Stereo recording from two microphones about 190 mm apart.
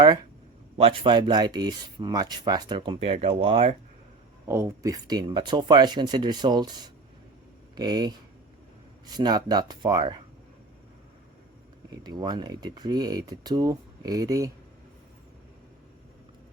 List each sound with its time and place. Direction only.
0.8 s speech: 30° right (ahead or behind)
4.4 s speech: 15° right (ahead or behind)
11.9 s speech: 20° right (ahead or behind)